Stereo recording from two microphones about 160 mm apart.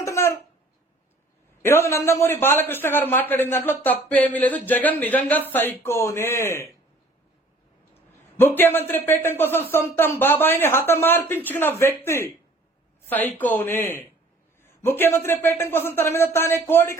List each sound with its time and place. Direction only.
0.0 s a sound: 15° left (ahead or behind)
1.6 s speech: 15° left (ahead or behind)
8.4 s speech: 15° left (ahead or behind)